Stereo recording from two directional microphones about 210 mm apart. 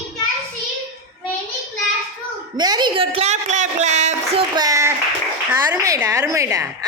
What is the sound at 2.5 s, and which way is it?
A man's voice, 20° right (ahead or behind).